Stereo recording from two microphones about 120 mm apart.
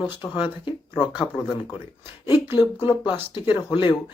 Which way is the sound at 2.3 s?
40° left (ahead or behind).